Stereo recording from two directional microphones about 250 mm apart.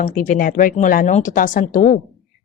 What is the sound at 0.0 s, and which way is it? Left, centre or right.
A woman's voice, left.